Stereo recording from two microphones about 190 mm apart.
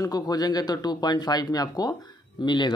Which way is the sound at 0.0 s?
20° left (ahead or behind).